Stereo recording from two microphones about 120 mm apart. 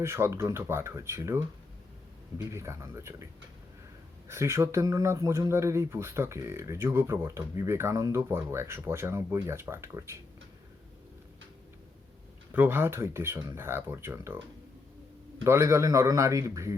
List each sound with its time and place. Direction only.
0.0 s speech: 20° right (ahead or behind)
2.4 s speech: 25° right (ahead or behind)
4.3 s speech: 25° right (ahead or behind)
12.5 s speech: 20° right (ahead or behind)
15.4 s speech: 25° right (ahead or behind)